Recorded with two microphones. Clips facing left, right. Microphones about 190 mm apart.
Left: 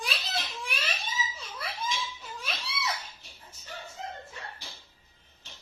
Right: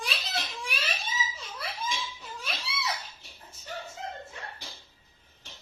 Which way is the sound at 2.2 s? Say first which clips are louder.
Even; centre (ahead or behind).